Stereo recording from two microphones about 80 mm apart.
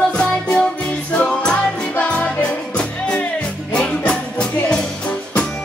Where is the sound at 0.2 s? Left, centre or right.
Centre.